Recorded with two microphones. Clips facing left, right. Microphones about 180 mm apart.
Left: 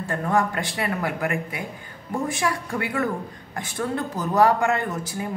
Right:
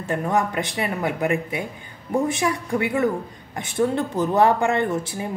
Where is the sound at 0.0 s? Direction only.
20° right (ahead or behind).